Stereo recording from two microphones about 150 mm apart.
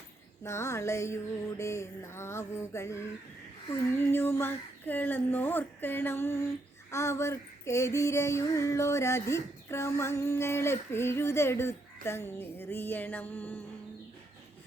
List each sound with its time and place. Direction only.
0.4 s mantra: 20° left (ahead or behind)
3.9 s female singing: 15° left (ahead or behind)